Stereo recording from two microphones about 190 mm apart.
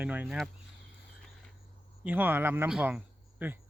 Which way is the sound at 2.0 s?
10° right (ahead or behind).